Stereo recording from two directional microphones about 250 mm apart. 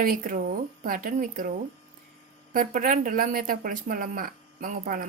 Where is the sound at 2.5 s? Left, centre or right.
Right.